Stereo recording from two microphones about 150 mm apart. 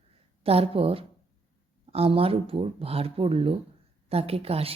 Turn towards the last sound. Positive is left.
turn(degrees=-40)  # may be behind; listen again after turning